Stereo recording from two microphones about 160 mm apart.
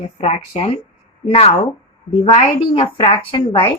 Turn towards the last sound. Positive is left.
turn(degrees=30)  # may be behind; listen again after turning